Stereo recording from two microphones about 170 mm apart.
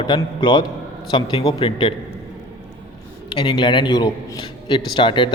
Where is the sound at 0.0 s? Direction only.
25° left (ahead or behind).